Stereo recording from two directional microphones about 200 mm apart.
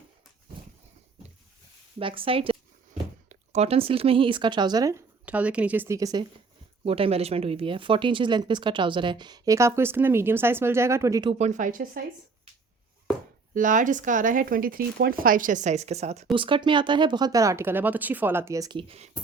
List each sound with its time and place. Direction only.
2.0 s speech: 25° right (ahead or behind)
6.8 s speech: 30° right (ahead or behind)
11.3 s speech: 35° right (ahead or behind)
13.5 s speech: 40° right (ahead or behind)